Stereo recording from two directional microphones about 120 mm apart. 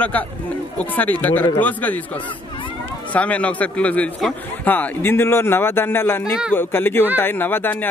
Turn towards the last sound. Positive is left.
turn(degrees=15)  # may be behind; listen again after turning